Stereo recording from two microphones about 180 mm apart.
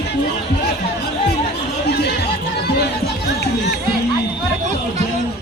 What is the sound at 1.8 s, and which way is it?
Chatter, 70° left (ahead or behind).